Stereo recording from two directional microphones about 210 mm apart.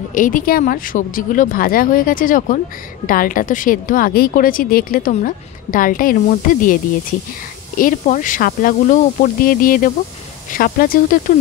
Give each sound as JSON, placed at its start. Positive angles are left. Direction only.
{"t": 0.1, "sound": "speech", "side_deg": 40}